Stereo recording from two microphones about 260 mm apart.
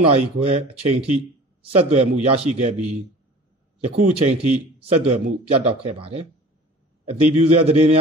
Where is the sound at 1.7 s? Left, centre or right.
Right.